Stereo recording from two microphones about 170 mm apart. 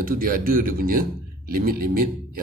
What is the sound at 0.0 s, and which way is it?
A man's voice, 60° right (ahead or behind).